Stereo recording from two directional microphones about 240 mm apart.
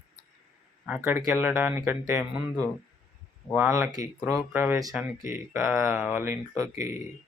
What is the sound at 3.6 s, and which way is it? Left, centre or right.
Speech, centre.